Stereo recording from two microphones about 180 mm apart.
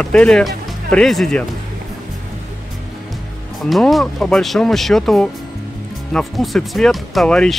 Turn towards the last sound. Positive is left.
turn(degrees=5)  # may be behind; listen again after turning